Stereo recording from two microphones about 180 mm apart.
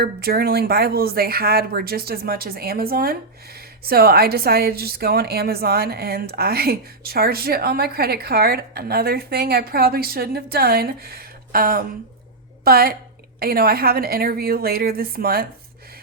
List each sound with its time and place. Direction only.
0.0 s speech: 60° right (ahead or behind)